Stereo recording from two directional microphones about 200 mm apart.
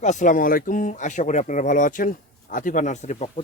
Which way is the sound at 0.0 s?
35° left (ahead or behind).